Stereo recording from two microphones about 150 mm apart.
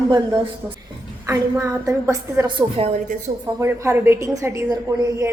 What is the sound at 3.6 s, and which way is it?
A woman's voice, 20° right (ahead or behind).